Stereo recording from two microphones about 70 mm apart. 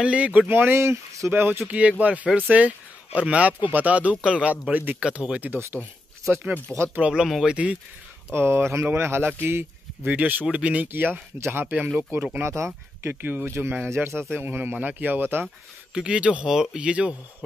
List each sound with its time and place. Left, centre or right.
0.0 s speech: centre
0.5 s speech: right
1.7 s speech: centre
5.5 s speech: right
7.0 s speech: centre
8.3 s speech: right
10.0 s speech: right
12.4 s speech: right
13.1 s speech: right
15.9 s speech: centre